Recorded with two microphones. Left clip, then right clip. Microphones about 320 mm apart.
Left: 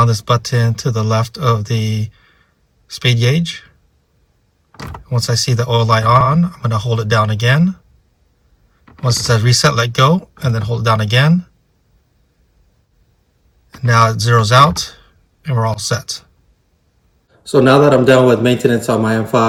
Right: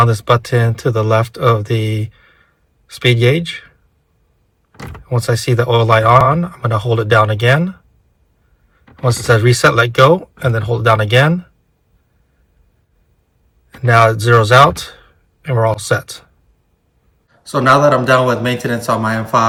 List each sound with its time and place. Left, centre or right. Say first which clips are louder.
0.0 s speech: right 2 dB; centre
5.0 s speech: right 2 dB; centre
9.2 s speech: right 4 dB; centre
13.7 s speech: right 2 dB; centre
17.4 s speech: left 1 dB; centre